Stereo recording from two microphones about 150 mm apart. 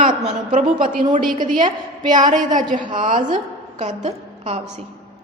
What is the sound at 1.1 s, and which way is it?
Speech, 65° right (ahead or behind).